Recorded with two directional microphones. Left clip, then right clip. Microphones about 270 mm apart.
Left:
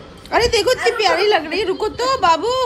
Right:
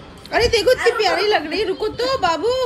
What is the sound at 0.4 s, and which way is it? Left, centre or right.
Speech, centre.